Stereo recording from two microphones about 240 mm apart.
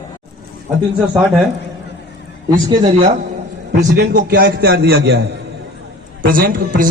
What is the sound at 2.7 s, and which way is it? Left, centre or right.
Speech, right.